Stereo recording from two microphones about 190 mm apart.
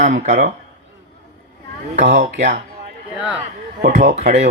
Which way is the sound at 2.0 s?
40° right (ahead or behind).